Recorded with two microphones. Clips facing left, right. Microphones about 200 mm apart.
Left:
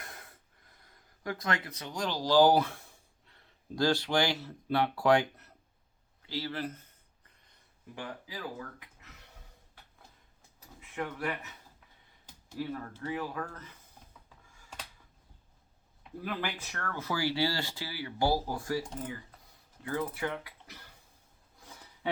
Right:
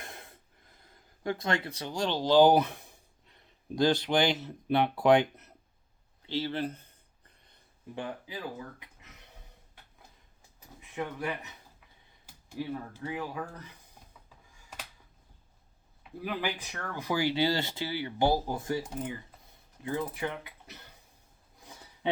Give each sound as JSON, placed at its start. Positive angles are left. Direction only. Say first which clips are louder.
{"t": 0.0, "sound": "gasp", "louder": "right 3 dB", "side_deg": -25}
{"t": 6.2, "sound": "speech", "louder": "right 4 dB", "side_deg": -25}
{"t": 7.9, "sound": "speech", "louder": "right 4 dB", "side_deg": -25}
{"t": 10.9, "sound": "speech", "louder": "right 1 dB", "side_deg": -15}
{"t": 16.2, "sound": "speech", "louder": "right 3 dB", "side_deg": -15}
{"t": 19.8, "sound": "speech", "louder": "right 1 dB", "side_deg": -20}
{"t": 21.6, "sound": "a sound", "louder": "right 3 dB", "side_deg": -20}